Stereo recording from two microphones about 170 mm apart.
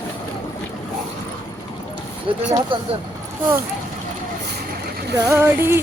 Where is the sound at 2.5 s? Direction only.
30° right (ahead or behind).